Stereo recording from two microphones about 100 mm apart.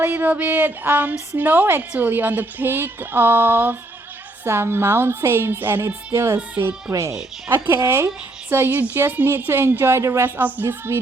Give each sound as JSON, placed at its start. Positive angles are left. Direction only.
{"t": 0.0, "sound": "a woman's voice", "side_deg": -20}
{"t": 6.1, "sound": "a woman's voice", "side_deg": -30}